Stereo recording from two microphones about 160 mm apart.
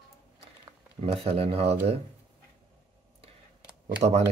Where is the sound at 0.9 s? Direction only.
40° right (ahead or behind).